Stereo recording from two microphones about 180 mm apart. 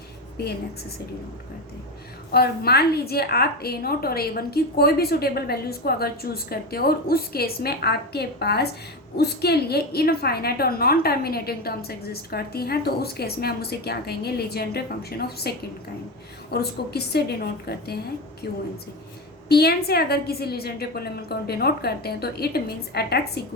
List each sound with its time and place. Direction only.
0.3 s a woman's voice: 60° left (ahead or behind)
2.3 s a woman's voice: 60° left (ahead or behind)